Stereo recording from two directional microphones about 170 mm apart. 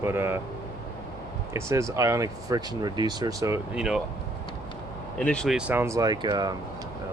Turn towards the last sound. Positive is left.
turn(degrees=-25)  # may be behind; listen again after turning